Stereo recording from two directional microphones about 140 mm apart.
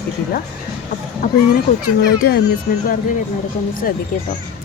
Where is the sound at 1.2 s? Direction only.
80° left.